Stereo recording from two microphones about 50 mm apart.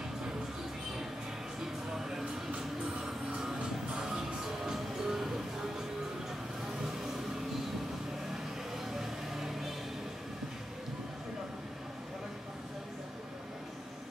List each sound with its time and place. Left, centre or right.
2.0 s a sound: centre
3.0 s music: centre
8.9 s vehicle: centre